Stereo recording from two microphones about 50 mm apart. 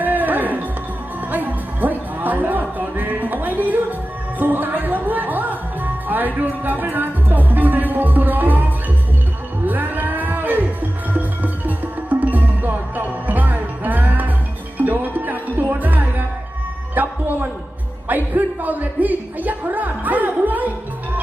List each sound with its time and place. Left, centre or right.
0.0 s music: right
9.6 s music: right
18.1 s a sound: right